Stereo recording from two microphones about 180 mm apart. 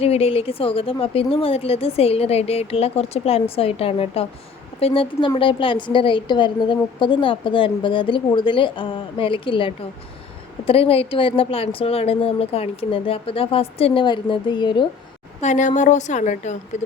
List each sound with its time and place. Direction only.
0.0 s a woman's voice: 35° left (ahead or behind)
15.4 s speech: 40° left (ahead or behind)